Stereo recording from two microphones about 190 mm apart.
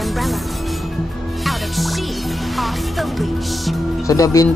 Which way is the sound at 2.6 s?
Centre (ahead or behind).